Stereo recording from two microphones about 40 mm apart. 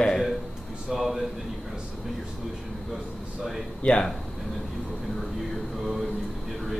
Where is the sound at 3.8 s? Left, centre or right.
Left.